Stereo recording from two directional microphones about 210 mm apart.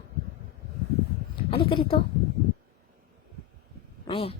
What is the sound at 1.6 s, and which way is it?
Speech, 25° left (ahead or behind).